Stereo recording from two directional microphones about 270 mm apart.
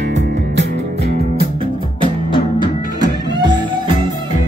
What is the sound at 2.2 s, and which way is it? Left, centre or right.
Music, centre.